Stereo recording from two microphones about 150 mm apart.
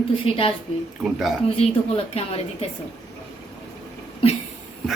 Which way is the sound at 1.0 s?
Centre (ahead or behind).